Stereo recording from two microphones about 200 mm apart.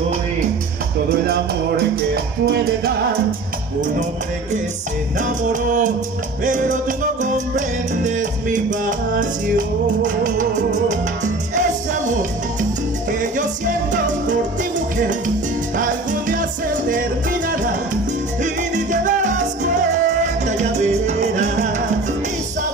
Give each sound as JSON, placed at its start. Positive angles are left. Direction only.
{"t": 1.1, "sound": "music", "side_deg": -50}
{"t": 2.5, "sound": "music", "side_deg": -50}
{"t": 5.2, "sound": "music", "side_deg": -40}
{"t": 15.8, "sound": "salsa music", "side_deg": -40}
{"t": 16.9, "sound": "music", "side_deg": -40}
{"t": 18.4, "sound": "salsa music", "side_deg": -40}